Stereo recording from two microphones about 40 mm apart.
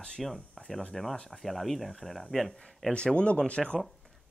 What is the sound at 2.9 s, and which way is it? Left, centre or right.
Speech, left.